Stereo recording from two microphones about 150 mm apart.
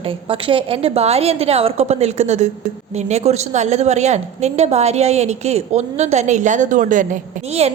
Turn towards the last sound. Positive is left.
turn(degrees=-45)  # may be behind; listen again after turning